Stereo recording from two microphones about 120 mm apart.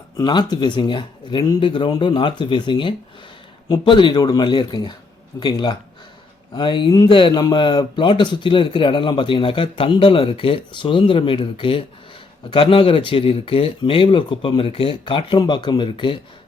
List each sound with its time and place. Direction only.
0.2 s a man's voice: 35° left (ahead or behind)